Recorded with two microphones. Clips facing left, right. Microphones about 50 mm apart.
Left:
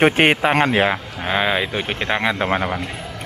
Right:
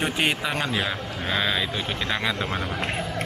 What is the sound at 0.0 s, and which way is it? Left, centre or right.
Speech, left.